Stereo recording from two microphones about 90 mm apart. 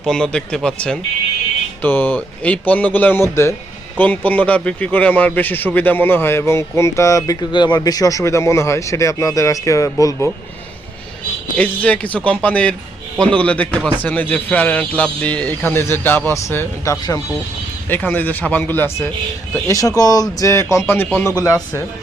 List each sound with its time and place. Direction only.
0.0 s a man's voice: 5° left (ahead or behind)
1.8 s a man's voice: 20° left (ahead or behind)
3.9 s a man's voice: 20° left (ahead or behind); by 7.3 s 40° left (ahead or behind)
7.5 s speech: 55° left (ahead or behind); by 10.2 s 35° left (ahead or behind)
11.5 s a man's voice: 15° left (ahead or behind); by 17.2 s 35° left (ahead or behind)
17.8 s a man's voice: 20° left (ahead or behind)
19.5 s speech: 40° left (ahead or behind)
20.4 s speech: 35° left (ahead or behind)
21.4 s speech: 35° left (ahead or behind)